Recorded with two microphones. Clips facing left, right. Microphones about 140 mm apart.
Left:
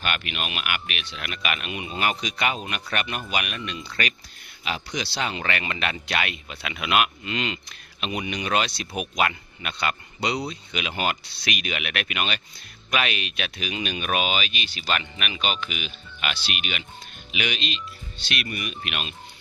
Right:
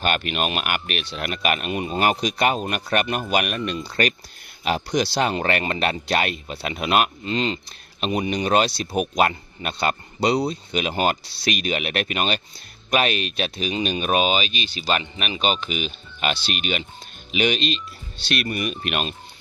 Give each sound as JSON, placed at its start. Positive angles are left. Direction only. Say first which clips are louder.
{"t": 0.0, "sound": "speech", "louder": "right 7 dB", "side_deg": -40}